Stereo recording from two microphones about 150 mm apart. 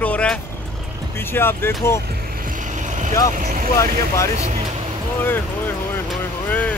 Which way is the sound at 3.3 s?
65° right (ahead or behind).